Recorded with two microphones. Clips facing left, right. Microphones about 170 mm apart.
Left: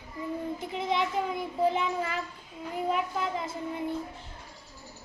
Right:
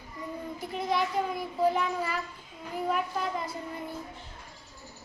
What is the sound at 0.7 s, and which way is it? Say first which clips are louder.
A child's voice: right 1 dB; 20° left (ahead or behind).